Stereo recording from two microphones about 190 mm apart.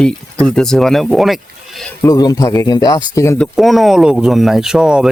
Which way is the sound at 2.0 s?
20° left (ahead or behind).